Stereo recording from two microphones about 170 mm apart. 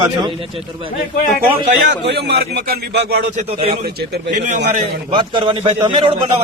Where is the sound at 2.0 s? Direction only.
75° right (ahead or behind).